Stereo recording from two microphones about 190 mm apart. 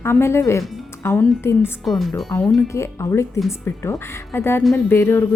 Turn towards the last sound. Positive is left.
turn(degrees=10)  # may be behind; listen again after turning